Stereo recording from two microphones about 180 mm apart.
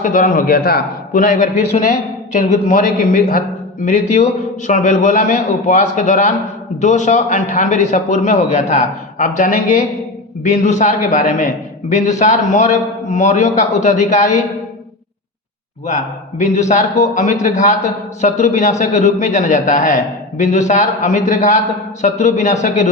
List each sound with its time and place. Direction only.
0.0 s a man's voice: 45° left (ahead or behind)
16.4 s a man's voice: 40° left (ahead or behind)